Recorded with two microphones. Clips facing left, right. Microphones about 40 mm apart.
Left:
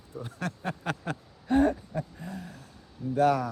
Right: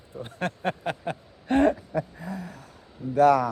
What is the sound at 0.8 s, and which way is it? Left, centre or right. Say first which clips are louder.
Speech: right 3 dB; centre.